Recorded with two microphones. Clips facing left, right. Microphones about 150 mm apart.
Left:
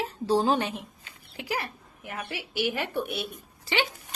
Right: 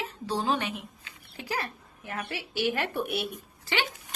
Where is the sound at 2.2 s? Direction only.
Centre (ahead or behind).